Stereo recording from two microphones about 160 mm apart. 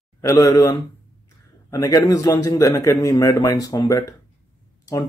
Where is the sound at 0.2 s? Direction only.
20° left (ahead or behind).